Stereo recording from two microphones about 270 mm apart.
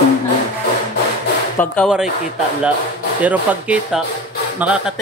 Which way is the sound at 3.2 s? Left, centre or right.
Centre.